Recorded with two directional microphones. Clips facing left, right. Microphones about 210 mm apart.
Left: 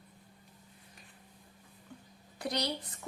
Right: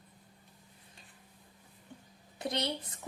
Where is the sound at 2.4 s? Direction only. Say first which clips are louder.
Even; 25° right (ahead or behind).